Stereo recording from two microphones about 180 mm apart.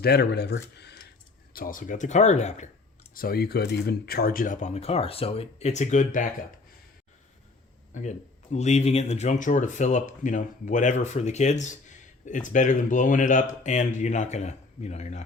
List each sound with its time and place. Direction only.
0.0 s speech: 65° left (ahead or behind)
1.5 s speech: 50° left (ahead or behind)
3.2 s speech: 55° left (ahead or behind)
7.9 s speech: 45° left (ahead or behind)